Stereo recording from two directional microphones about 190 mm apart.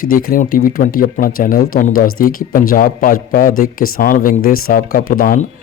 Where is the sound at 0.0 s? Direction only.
50° left (ahead or behind).